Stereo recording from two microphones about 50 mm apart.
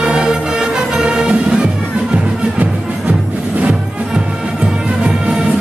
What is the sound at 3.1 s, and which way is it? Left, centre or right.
Music, right.